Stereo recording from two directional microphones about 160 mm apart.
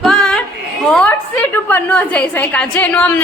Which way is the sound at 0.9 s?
5° left (ahead or behind).